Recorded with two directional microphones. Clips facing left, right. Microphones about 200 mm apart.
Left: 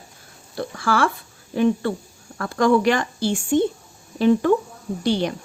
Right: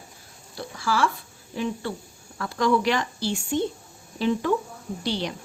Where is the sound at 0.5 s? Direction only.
55° left (ahead or behind).